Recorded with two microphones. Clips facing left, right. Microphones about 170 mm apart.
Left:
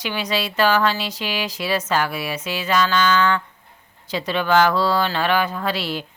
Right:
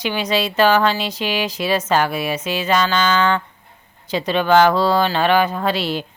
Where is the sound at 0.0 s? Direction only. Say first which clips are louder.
Right 4 dB; 20° right (ahead or behind).